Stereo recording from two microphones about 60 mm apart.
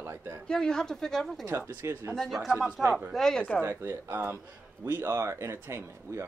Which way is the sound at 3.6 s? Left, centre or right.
Right.